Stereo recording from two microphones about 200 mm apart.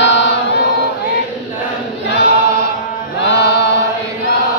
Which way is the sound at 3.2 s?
60° left (ahead or behind).